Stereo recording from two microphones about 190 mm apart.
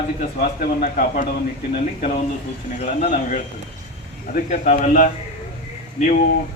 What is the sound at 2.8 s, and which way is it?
A man's voice, 40° left (ahead or behind).